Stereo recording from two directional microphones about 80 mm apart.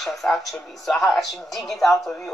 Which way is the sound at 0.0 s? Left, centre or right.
Centre.